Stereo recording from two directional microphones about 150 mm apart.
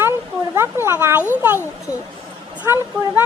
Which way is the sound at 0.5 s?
15° right (ahead or behind).